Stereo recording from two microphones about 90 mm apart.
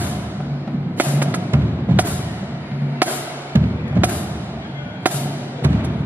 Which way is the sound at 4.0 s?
20° right (ahead or behind).